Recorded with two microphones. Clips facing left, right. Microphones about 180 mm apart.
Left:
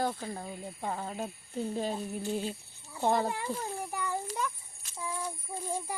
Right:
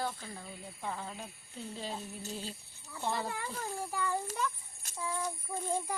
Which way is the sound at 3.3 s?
20° left (ahead or behind).